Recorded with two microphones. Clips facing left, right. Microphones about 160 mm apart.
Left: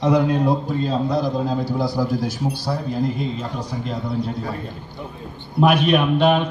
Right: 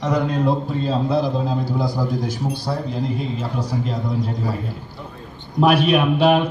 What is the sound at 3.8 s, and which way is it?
Speech, 45° right (ahead or behind).